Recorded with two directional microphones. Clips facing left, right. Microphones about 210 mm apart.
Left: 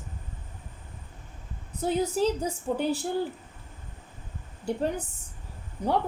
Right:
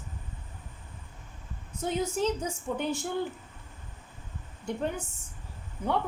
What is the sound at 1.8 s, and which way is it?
A woman's voice, 35° left (ahead or behind).